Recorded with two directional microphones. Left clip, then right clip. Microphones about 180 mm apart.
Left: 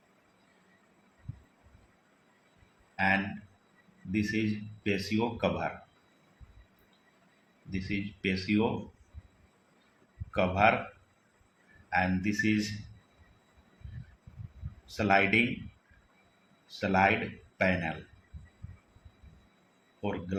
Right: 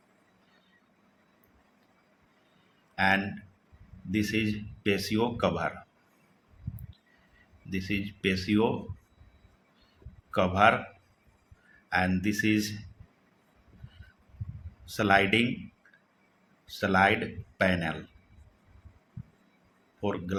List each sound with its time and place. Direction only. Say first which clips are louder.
2.9 s a sound: right 3 dB; 35° right (ahead or behind)
4.1 s speech: right 2 dB; 35° right (ahead or behind)
7.7 s speech: right 3 dB; 35° right (ahead or behind)
10.3 s speech: right 3 dB; 35° right (ahead or behind)
11.9 s speech: right 1 dB; 30° right (ahead or behind)
14.8 s speech: right 2 dB; 30° right (ahead or behind)
16.6 s speech: right 2 dB; 35° right (ahead or behind)
20.0 s speech: right 3 dB; 35° right (ahead or behind)